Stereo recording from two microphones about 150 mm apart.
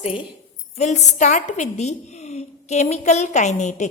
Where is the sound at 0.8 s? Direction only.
50° left (ahead or behind).